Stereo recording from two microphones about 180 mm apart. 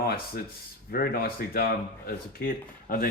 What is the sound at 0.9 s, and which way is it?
Speech, 55° left (ahead or behind).